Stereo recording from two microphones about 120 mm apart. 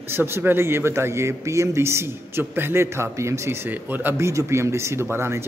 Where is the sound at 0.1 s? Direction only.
20° right (ahead or behind).